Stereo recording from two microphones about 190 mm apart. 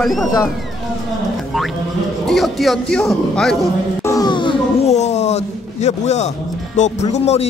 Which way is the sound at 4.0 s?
20° left (ahead or behind).